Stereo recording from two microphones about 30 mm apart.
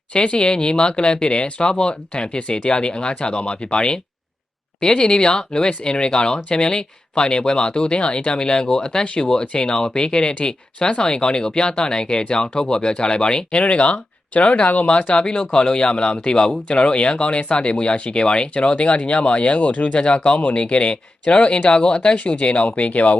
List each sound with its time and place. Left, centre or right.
0.1 s speech: left
9.0 s speech: left
14.8 s speech: left